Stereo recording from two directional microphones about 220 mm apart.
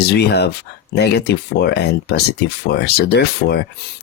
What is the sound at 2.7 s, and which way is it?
Speech, 50° left (ahead or behind).